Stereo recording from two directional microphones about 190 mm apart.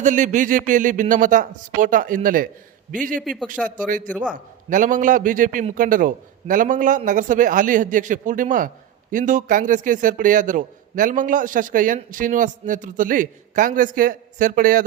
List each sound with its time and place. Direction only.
0.0 s a man's voice: 40° right (ahead or behind)
3.2 s speech: centre (ahead or behind)
3.8 s a man's voice: 45° right (ahead or behind)